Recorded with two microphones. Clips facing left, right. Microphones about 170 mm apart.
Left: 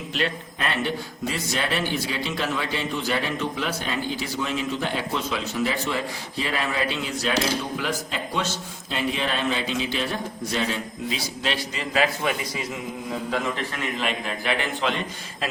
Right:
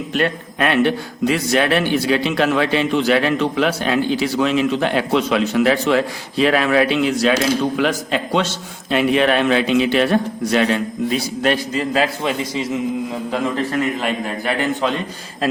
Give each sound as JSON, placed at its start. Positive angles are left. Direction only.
{"t": 0.1, "sound": "a man's voice", "side_deg": -55}
{"t": 8.9, "sound": "a man's voice", "side_deg": -65}
{"t": 11.1, "sound": "a man's voice", "side_deg": -50}
{"t": 14.0, "sound": "a man's voice", "side_deg": -40}